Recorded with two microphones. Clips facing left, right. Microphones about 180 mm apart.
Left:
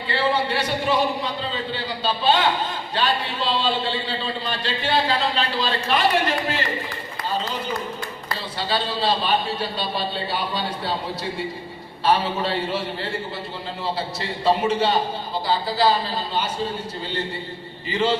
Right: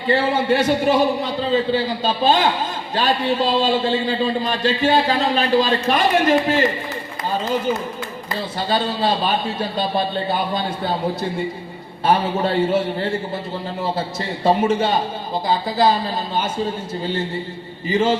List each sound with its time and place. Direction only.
0.1 s a man's voice: 45° right (ahead or behind)
8.5 s a man's voice: 45° right (ahead or behind)
14.4 s a man's voice: 50° right (ahead or behind)
17.8 s a man's voice: 45° right (ahead or behind)